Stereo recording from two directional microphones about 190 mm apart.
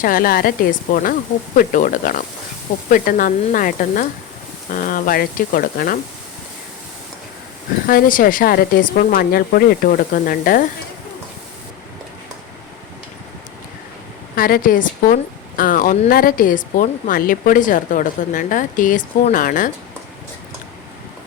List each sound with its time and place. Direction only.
0.0 s a woman's voice: 50° left (ahead or behind)
7.9 s a woman's voice: 45° left (ahead or behind)
14.3 s a woman's voice: 50° left (ahead or behind)